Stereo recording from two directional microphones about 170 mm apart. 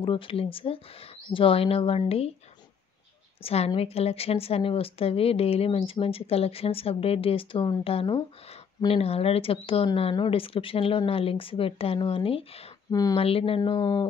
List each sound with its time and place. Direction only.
0.0 s a woman's voice: 30° left (ahead or behind)
3.4 s a woman's voice: 35° left (ahead or behind)
12.9 s speech: 20° left (ahead or behind)
13.2 s a woman's voice: 35° left (ahead or behind)